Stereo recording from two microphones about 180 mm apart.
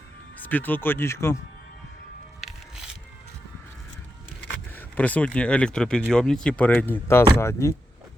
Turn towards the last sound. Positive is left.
turn(degrees=15)  # may be behind; listen again after turning